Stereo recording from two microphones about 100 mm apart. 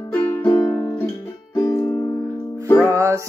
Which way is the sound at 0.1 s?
20° left (ahead or behind).